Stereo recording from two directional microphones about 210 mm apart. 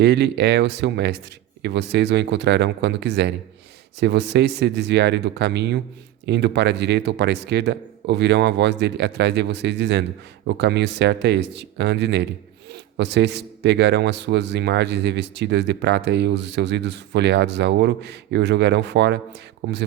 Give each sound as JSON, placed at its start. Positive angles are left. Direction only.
{"t": 0.0, "sound": "speech", "side_deg": -55}